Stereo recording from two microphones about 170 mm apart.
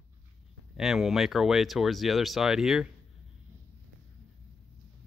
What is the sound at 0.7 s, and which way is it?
Speech, centre (ahead or behind).